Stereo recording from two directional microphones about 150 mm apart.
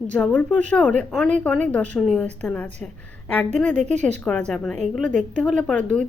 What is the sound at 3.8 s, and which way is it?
Speech, 50° right (ahead or behind).